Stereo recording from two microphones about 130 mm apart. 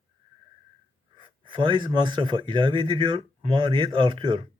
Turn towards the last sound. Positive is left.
turn(degrees=-40)  # may be behind; listen again after turning